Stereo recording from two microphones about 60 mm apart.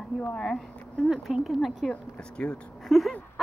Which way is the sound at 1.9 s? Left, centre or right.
Centre.